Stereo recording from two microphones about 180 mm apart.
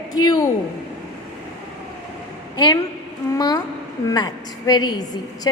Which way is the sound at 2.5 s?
20° left (ahead or behind).